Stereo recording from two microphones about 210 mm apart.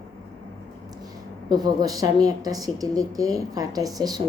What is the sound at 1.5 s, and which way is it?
Speech, 20° right (ahead or behind).